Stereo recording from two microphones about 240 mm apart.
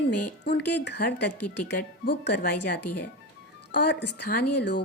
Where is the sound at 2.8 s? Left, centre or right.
Left.